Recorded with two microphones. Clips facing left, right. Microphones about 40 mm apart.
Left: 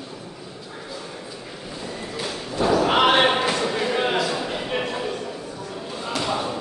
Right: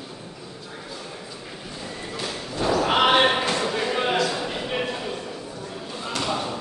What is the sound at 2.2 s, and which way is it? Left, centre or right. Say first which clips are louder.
Thump: left 3 dB; centre.